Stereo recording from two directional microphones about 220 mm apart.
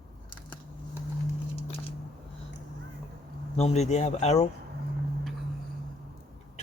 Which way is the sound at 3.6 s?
30° left (ahead or behind).